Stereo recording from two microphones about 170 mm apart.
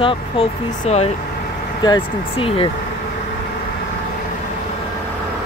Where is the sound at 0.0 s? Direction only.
35° left (ahead or behind).